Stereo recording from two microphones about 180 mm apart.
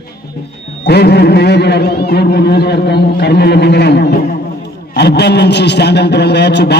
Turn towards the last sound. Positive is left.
turn(degrees=70)  # may be behind; listen again after turning